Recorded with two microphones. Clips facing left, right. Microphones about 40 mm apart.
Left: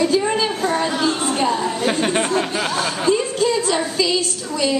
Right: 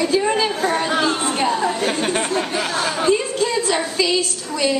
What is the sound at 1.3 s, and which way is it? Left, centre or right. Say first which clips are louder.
Speech: even; centre.